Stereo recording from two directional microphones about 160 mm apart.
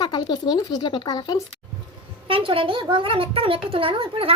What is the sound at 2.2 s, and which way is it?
A woman's voice, 35° right (ahead or behind).